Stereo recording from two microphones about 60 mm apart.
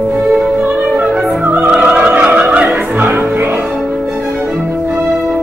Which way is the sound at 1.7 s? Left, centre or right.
Centre.